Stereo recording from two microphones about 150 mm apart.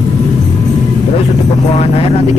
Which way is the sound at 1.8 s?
40° left (ahead or behind).